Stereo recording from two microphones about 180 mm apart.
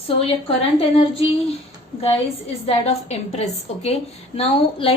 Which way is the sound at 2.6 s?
35° left (ahead or behind).